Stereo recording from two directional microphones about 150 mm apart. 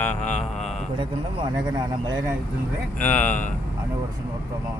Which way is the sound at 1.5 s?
25° right (ahead or behind).